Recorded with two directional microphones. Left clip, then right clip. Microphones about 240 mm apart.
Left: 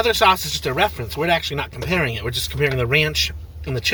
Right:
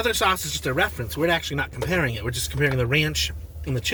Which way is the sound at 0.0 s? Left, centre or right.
Centre.